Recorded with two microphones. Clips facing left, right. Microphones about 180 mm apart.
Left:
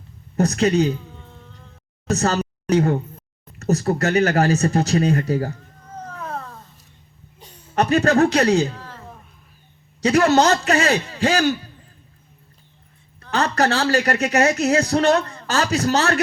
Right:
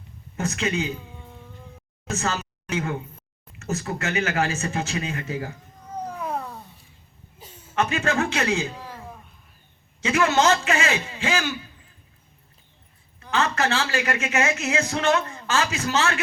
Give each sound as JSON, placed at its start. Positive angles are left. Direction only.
{"t": 0.3, "sound": "speech", "side_deg": 40}
{"t": 1.0, "sound": "a sound", "side_deg": -10}
{"t": 2.0, "sound": "a woman's voice", "side_deg": 40}
{"t": 5.9, "sound": "cat", "side_deg": -10}
{"t": 7.4, "sound": "a sound", "side_deg": -5}
{"t": 7.8, "sound": "speech", "side_deg": 40}
{"t": 8.7, "sound": "a sound", "side_deg": -10}
{"t": 10.0, "sound": "speech", "side_deg": 40}
{"t": 13.3, "sound": "speech", "side_deg": 40}